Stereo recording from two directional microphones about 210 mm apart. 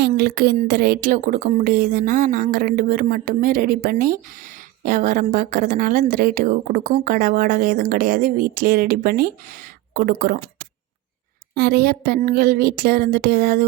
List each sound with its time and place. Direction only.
0.2 s a woman's voice: 45° right (ahead or behind)
11.5 s speech: 45° right (ahead or behind)